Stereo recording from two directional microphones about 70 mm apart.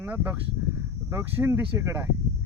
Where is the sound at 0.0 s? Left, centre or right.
Right.